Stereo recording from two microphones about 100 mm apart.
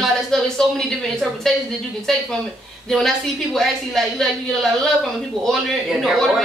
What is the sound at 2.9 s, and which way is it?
Speech, 5° left (ahead or behind).